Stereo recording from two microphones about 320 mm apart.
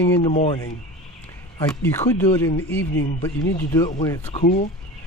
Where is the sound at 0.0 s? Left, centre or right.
Centre.